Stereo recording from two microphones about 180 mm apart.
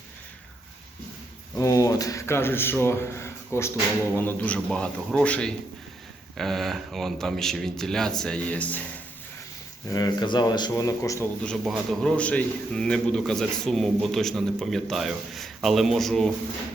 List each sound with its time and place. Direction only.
1.5 s a man's voice: 15° left (ahead or behind)
9.9 s speech: 20° left (ahead or behind)
11.4 s a man's voice: centre (ahead or behind)